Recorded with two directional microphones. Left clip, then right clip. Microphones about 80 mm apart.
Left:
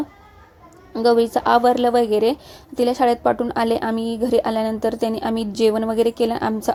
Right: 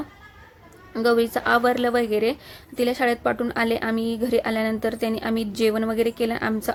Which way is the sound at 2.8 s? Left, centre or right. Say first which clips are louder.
Left 4 dB; left.